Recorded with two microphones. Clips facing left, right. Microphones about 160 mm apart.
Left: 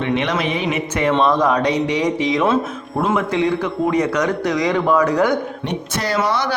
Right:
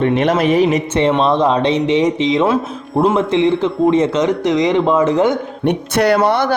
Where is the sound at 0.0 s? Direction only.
45° right (ahead or behind).